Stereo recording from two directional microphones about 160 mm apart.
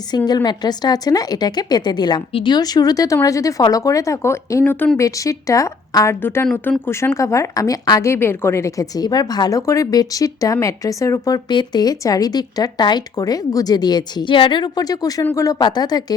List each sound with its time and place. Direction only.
0.3 s speech: 25° left (ahead or behind)